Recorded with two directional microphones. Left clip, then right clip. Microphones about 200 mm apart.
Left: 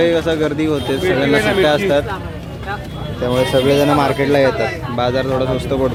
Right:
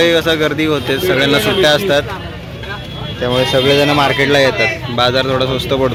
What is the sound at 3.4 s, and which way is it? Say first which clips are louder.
Speech: right 2 dB; 5° left (ahead or behind).